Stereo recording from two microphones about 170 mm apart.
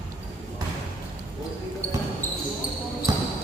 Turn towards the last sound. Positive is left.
turn(degrees=-20)  # may be behind; listen again after turning